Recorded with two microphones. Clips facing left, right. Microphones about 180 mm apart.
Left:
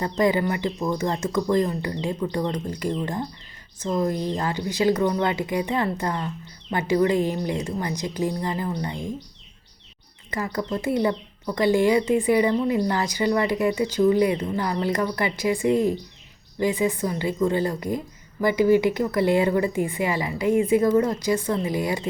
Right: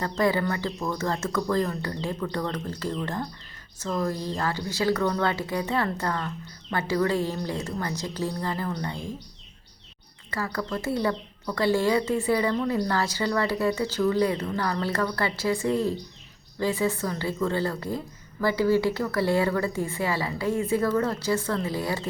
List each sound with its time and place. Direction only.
0.0 s speech: 15° left (ahead or behind)
10.3 s speech: 20° left (ahead or behind)